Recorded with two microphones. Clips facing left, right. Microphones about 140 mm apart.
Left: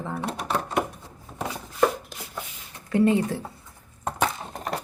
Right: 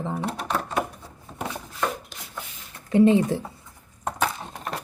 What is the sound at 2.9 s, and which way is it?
Speech, 20° right (ahead or behind).